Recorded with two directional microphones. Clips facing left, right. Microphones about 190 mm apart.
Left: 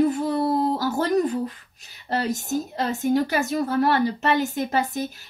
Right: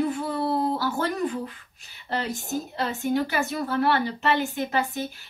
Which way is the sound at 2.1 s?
40° left (ahead or behind).